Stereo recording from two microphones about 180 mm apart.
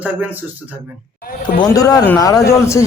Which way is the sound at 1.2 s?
50° left (ahead or behind).